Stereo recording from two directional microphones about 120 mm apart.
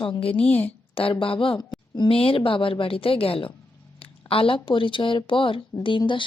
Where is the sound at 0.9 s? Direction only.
50° left (ahead or behind).